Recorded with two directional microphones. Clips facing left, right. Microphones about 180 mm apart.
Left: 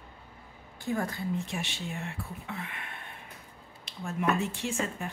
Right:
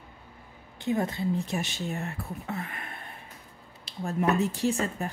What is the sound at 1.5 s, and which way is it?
A woman's voice, 40° right (ahead or behind).